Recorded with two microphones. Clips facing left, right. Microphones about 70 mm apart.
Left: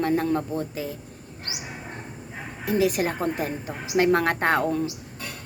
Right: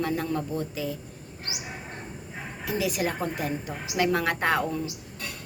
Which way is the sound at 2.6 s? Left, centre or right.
Left.